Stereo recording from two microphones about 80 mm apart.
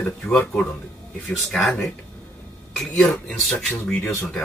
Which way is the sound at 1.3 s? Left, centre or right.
Centre.